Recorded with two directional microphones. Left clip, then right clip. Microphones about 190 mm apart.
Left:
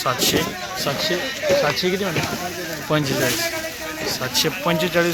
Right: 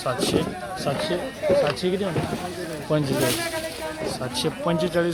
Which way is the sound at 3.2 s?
60° right (ahead or behind).